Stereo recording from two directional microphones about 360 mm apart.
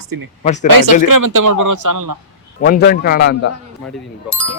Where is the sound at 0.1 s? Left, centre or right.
Right.